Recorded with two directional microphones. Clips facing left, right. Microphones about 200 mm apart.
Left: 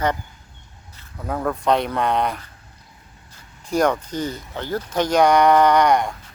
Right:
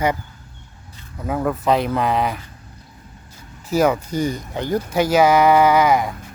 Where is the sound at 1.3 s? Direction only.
5° right (ahead or behind).